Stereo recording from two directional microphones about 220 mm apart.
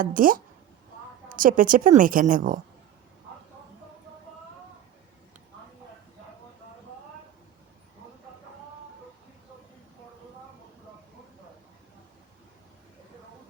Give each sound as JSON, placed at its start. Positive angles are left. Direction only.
{"t": 0.0, "sound": "a woman's voice", "side_deg": -40}